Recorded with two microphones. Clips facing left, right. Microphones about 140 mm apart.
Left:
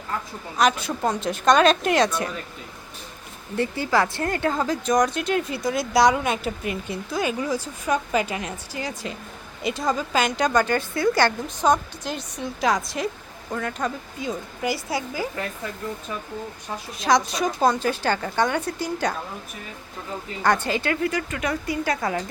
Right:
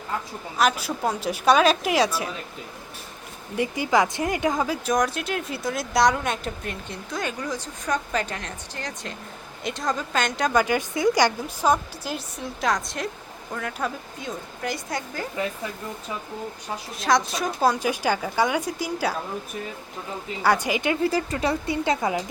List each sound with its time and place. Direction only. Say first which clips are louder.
0.6 s speech: left 1 dB; 5° right (ahead or behind)
3.6 s speech: even; 15° right (ahead or behind); by 15.3 s 5° left (ahead or behind)
17.0 s speech: left 2 dB; centre (ahead or behind)
20.4 s speech: even; 10° right (ahead or behind)
21.1 s speech: right 2 dB; 30° right (ahead or behind)